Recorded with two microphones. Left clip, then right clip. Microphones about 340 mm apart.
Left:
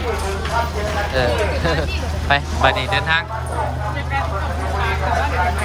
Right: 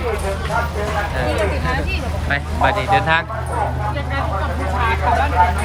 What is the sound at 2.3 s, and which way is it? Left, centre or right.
Speech, centre.